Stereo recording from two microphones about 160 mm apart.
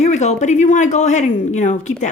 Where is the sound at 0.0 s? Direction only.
45° left (ahead or behind).